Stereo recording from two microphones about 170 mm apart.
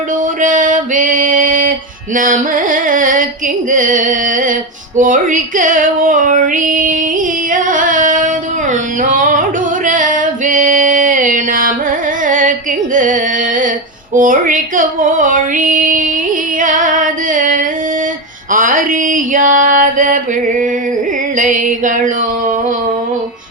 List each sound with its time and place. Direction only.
0.4 s a sound: 50° right (ahead or behind)
2.1 s female singing: 50° right (ahead or behind)
7.5 s music: 50° right (ahead or behind)
9.0 s singing: 50° right (ahead or behind)
12.3 s music: 50° right (ahead or behind)
14.1 s female singing: 50° right (ahead or behind)
18.5 s a sound: 55° right (ahead or behind)
21.3 s female singing: 50° right (ahead or behind)